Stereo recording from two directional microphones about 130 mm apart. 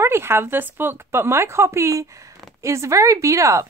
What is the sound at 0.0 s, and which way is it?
Speech, 20° right (ahead or behind).